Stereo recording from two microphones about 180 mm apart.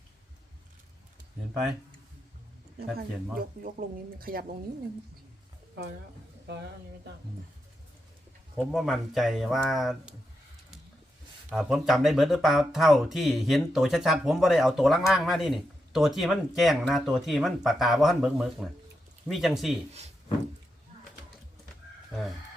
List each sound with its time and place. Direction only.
3.3 s speech: 55° right (ahead or behind)
8.5 s speech: centre (ahead or behind)
11.5 s speech: centre (ahead or behind)